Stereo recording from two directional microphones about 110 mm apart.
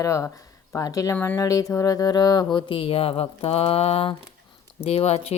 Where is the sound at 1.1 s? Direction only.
20° left (ahead or behind).